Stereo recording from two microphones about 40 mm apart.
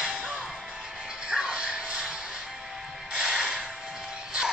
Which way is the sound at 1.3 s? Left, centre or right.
Right.